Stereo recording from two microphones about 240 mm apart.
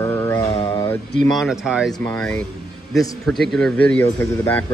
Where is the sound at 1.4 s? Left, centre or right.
Centre.